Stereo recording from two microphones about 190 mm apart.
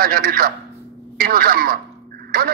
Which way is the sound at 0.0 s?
50° right (ahead or behind).